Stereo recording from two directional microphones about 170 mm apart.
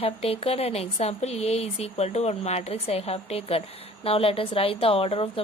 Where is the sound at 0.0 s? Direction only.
35° left (ahead or behind).